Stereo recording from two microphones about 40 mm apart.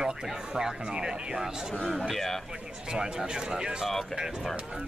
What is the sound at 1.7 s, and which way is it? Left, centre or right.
Speech, centre.